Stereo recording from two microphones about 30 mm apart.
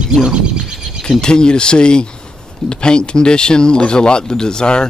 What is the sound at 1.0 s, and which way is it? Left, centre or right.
Speech, left.